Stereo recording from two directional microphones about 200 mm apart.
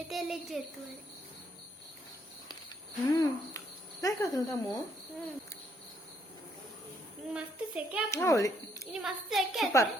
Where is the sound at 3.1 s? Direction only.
15° left (ahead or behind).